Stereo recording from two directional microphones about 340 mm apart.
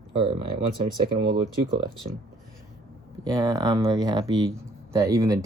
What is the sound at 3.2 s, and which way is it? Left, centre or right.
Speech, centre.